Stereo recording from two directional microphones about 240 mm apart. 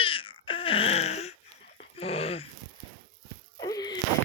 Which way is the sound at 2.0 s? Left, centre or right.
Left.